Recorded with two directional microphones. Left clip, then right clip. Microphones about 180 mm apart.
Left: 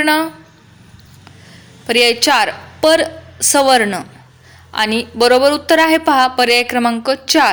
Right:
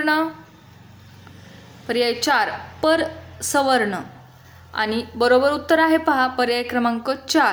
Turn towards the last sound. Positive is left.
turn(degrees=15)  # may be behind; listen again after turning